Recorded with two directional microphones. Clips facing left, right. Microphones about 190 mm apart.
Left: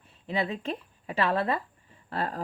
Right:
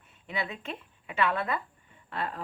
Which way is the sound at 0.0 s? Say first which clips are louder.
Left 5 dB; 35° left (ahead or behind).